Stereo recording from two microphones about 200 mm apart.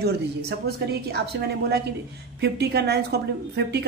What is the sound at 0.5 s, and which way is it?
A woman's voice, 55° right (ahead or behind).